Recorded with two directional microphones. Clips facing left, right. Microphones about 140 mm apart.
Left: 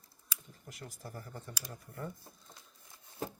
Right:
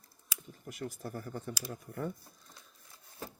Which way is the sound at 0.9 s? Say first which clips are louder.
Right 6 dB; 55° right (ahead or behind).